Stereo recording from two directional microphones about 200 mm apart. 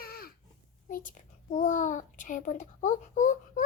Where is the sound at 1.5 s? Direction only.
40° left (ahead or behind).